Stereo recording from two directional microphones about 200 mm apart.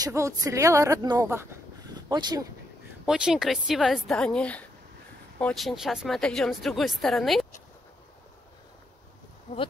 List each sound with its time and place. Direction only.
0.0 s a woman's voice: 15° right (ahead or behind)
3.1 s speech: 5° right (ahead or behind)